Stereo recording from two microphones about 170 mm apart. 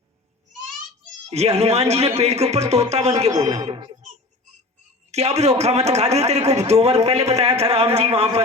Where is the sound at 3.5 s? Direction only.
20° right (ahead or behind).